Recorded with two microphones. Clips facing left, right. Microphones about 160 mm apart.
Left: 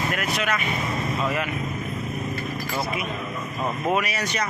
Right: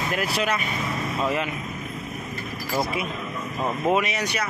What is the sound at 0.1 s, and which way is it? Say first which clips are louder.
Speech: right 1 dB; 30° right (ahead or behind).